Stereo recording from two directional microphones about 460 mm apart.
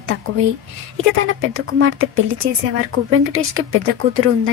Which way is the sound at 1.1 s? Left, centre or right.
Right.